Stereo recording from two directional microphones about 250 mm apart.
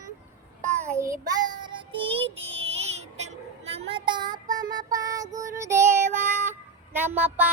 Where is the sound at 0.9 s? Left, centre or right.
Centre.